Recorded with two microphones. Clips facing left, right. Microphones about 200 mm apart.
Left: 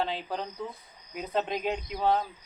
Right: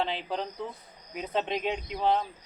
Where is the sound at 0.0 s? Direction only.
Centre (ahead or behind).